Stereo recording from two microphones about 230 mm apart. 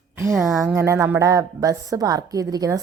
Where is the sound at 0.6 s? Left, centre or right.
Centre.